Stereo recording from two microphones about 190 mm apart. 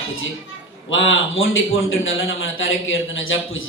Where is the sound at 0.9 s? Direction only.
90° left.